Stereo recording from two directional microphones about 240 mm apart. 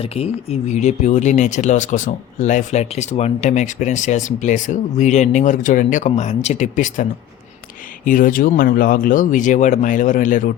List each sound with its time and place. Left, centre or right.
0.0 s speech: left